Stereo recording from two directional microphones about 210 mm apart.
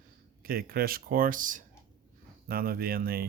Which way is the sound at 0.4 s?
45° right (ahead or behind).